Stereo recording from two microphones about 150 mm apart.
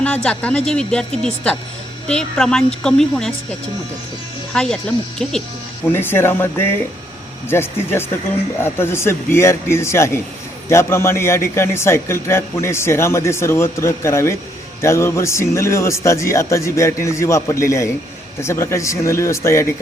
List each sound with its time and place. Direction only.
0.0 s speech: 10° left (ahead or behind)
2.0 s speech: 5° left (ahead or behind)
4.5 s speech: 5° left (ahead or behind)
5.8 s a man's voice: 15° left (ahead or behind)